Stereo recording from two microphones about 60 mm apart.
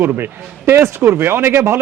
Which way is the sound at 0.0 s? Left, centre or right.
Right.